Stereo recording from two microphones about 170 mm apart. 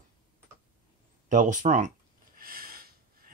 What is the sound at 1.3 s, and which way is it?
Speech, 50° right (ahead or behind).